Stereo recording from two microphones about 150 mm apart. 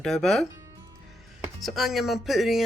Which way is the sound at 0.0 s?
5° left (ahead or behind).